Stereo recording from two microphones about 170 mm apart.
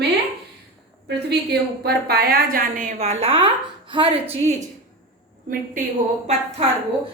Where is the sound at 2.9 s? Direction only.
35° right (ahead or behind).